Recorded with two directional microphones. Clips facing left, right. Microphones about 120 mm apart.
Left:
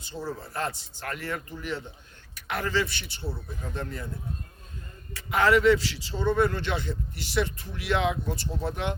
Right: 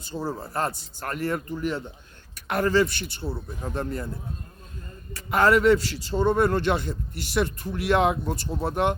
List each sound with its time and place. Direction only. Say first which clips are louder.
0.0 s a man's voice: right 4 dB; 45° right (ahead or behind)
5.1 s a man's voice: right 2 dB; 50° right (ahead or behind)